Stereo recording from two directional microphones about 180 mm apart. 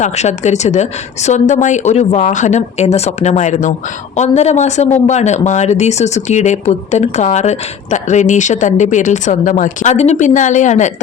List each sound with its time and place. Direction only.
0.0 s a woman's voice: 40° left (ahead or behind)